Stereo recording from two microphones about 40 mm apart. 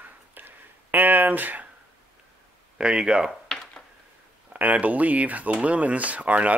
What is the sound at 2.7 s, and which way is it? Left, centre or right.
Speech, right.